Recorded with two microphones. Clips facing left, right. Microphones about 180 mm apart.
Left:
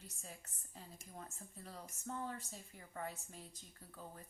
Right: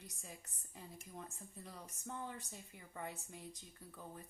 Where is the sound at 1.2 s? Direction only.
15° right (ahead or behind).